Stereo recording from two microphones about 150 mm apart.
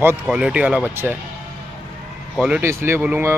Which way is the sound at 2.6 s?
15° right (ahead or behind).